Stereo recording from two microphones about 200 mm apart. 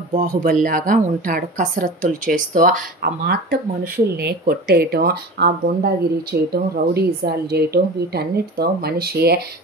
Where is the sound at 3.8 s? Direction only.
50° right (ahead or behind).